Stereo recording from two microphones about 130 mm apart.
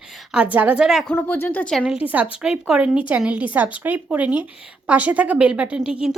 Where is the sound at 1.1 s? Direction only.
15° left (ahead or behind).